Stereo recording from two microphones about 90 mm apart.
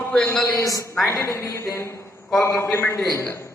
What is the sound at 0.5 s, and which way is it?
Speech, 40° left (ahead or behind).